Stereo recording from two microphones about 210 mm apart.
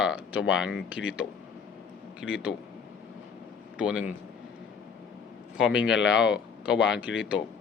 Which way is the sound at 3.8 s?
5° right (ahead or behind).